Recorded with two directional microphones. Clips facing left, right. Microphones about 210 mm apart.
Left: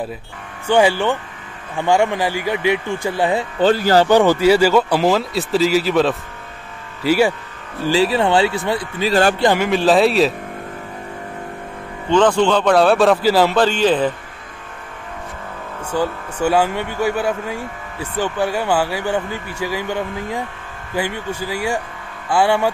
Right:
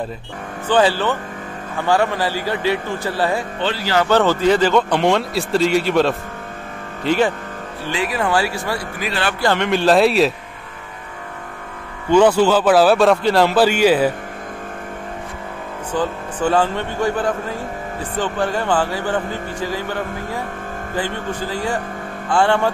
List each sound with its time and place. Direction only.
0.7 s speech: 15° left (ahead or behind)
3.5 s speech: 45° left (ahead or behind)
4.1 s a man's voice: 15° left (ahead or behind)
7.9 s speech: 30° left (ahead or behind)
9.6 s a man's voice: centre (ahead or behind)
12.1 s a man's voice: 10° right (ahead or behind)
15.9 s speech: 10° left (ahead or behind)